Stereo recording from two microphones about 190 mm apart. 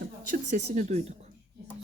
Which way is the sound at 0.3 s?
40° right (ahead or behind).